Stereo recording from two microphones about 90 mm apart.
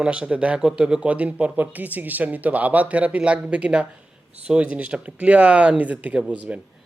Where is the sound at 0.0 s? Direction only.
10° right (ahead or behind).